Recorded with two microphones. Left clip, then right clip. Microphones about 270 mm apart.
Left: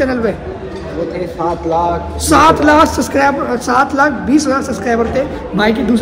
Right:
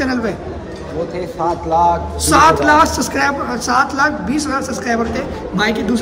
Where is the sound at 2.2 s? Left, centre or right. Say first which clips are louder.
Left 2 dB; centre.